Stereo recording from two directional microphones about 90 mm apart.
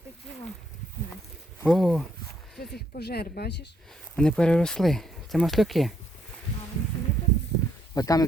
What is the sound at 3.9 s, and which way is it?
Speech, 10° left (ahead or behind).